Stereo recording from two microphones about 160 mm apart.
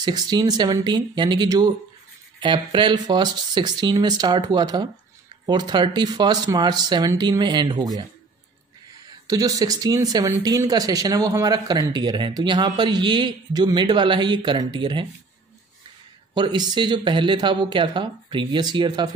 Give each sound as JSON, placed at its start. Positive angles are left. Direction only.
{"t": 0.0, "sound": "a man's voice", "side_deg": -25}
{"t": 9.3, "sound": "a man's voice", "side_deg": -20}
{"t": 16.3, "sound": "a man's voice", "side_deg": -25}